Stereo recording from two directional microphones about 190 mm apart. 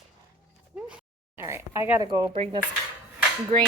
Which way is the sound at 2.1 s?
20° right (ahead or behind).